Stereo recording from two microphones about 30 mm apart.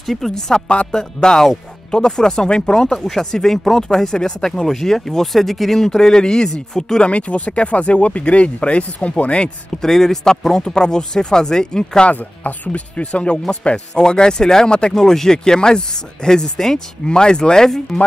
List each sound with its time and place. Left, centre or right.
0.0 s speech: centre
0.3 s speech: centre
3.0 s speech: centre
5.8 s speech: centre
7.0 s speech: left
9.8 s speech: centre
12.1 s speech: left
13.9 s speech: left